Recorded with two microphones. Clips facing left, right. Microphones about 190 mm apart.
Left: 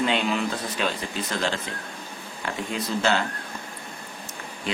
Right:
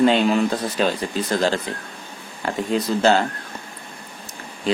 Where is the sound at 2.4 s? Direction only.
40° right (ahead or behind).